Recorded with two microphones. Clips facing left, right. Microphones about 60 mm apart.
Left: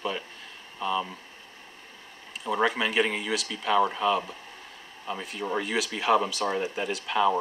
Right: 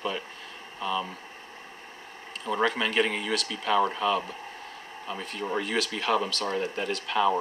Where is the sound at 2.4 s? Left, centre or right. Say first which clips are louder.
Left 1 dB; centre.